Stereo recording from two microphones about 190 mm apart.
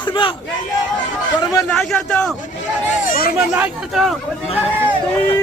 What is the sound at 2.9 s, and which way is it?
Chatter, 45° left (ahead or behind).